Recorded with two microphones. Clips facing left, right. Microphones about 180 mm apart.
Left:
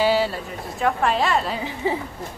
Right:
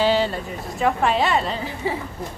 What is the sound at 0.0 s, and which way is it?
A woman's voice, 10° left (ahead or behind).